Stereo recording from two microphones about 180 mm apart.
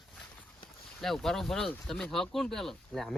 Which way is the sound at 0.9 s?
Centre (ahead or behind).